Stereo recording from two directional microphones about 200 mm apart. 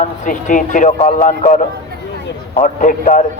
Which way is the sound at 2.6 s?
40° left (ahead or behind).